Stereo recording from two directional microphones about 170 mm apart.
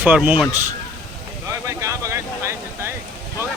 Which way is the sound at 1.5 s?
15° right (ahead or behind).